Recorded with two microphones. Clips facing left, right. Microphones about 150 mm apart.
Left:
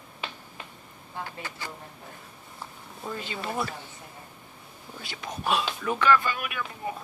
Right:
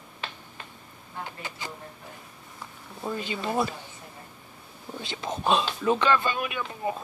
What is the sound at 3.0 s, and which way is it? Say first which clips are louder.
Speech: right 3 dB; 20° right (ahead or behind).